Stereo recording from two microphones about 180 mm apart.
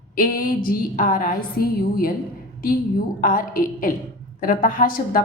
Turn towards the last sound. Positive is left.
turn(degrees=55)  # may be behind; listen again after turning